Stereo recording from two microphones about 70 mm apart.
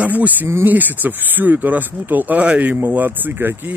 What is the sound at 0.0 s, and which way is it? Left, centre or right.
Speech, right.